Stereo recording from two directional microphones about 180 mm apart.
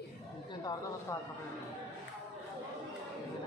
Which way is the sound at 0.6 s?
20° left (ahead or behind).